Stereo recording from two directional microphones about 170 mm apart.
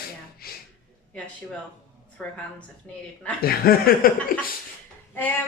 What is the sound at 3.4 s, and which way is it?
Speech, 60° left (ahead or behind).